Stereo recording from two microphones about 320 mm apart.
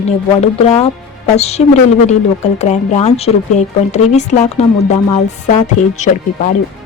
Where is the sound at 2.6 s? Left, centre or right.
Left.